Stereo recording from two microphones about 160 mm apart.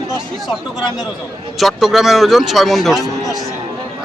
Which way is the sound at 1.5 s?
Centre (ahead or behind).